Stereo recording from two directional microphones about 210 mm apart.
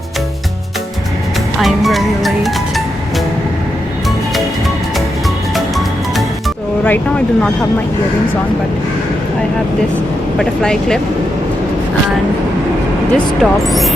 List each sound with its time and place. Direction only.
1.6 s music: centre (ahead or behind)
5.5 s music: centre (ahead or behind)
10.3 s speech: 5° left (ahead or behind)
13.4 s speech: centre (ahead or behind)